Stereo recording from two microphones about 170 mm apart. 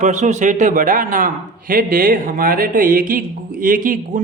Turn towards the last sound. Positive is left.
turn(degrees=-55)  # may be behind; listen again after turning